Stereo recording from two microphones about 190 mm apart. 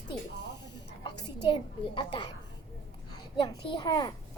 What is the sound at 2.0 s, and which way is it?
Speech, 25° left (ahead or behind).